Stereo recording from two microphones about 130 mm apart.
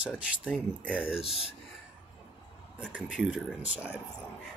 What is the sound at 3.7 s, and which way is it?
Speech, 10° right (ahead or behind).